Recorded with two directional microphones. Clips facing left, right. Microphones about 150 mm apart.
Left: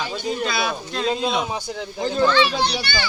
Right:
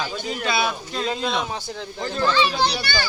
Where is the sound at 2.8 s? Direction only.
40° right (ahead or behind).